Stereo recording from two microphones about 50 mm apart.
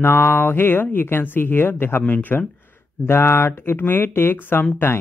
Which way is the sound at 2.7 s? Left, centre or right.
Left.